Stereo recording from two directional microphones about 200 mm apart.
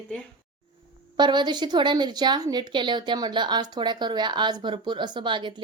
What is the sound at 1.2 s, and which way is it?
Speech, 20° right (ahead or behind).